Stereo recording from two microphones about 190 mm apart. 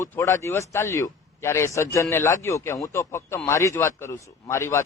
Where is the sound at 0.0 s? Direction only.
15° left (ahead or behind).